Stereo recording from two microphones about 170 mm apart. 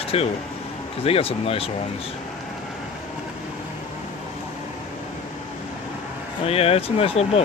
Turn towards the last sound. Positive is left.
turn(degrees=35)  # may be behind; listen again after turning